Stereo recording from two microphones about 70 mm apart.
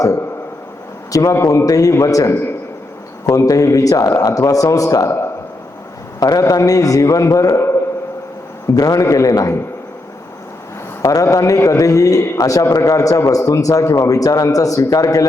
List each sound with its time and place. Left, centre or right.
1.1 s a man's voice: left
6.1 s a man's voice: left
8.7 s a man's voice: left
11.0 s a man's voice: left